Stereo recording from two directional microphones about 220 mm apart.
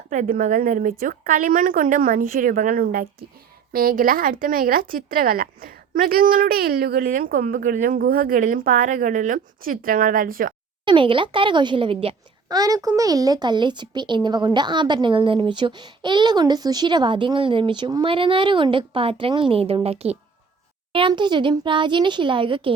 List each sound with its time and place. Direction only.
0.1 s a woman's voice: 35° right (ahead or behind)
10.8 s a child's voice: 20° right (ahead or behind)